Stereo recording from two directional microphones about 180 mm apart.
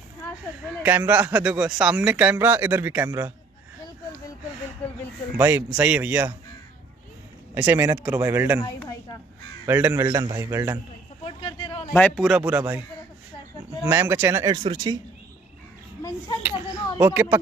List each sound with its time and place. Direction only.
0.8 s speech: 10° right (ahead or behind)
4.8 s a sound: 10° left (ahead or behind)
5.4 s speech: 10° right (ahead or behind)
7.5 s speech: 10° right (ahead or behind)
8.5 s a child's voice: 25° left (ahead or behind)
9.7 s speech: 10° right (ahead or behind)
11.2 s a sound: 30° left (ahead or behind)
11.9 s a man's voice: 5° left (ahead or behind)
12.3 s speech: 5° right (ahead or behind)
13.8 s speech: 10° right (ahead or behind)
16.0 s a child's voice: 20° left (ahead or behind)
17.0 s speech: 10° right (ahead or behind)